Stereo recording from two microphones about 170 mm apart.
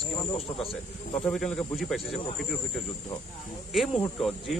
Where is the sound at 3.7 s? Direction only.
Centre (ahead or behind).